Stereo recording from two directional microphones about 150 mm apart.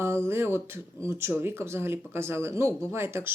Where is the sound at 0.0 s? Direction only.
15° right (ahead or behind).